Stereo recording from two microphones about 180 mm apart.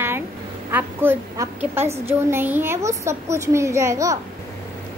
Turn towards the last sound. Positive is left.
turn(degrees=-15)  # may be behind; listen again after turning